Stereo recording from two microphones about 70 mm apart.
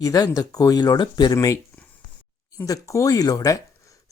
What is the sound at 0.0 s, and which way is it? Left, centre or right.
Speech, left.